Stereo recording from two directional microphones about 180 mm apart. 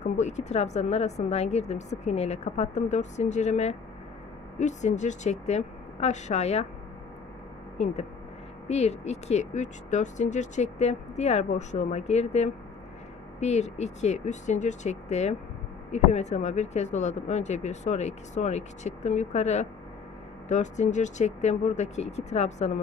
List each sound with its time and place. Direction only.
0.0 s speech: 40° left (ahead or behind)
7.7 s speech: 40° left (ahead or behind)